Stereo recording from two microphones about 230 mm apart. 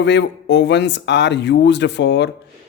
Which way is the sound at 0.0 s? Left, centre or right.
Left.